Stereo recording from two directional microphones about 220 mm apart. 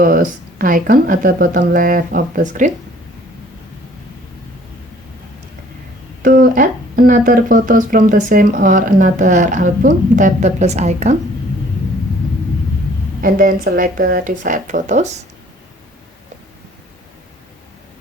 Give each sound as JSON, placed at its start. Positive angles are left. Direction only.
{"t": 0.0, "sound": "speech", "side_deg": -40}
{"t": 6.2, "sound": "speech", "side_deg": -40}
{"t": 13.2, "sound": "speech", "side_deg": -40}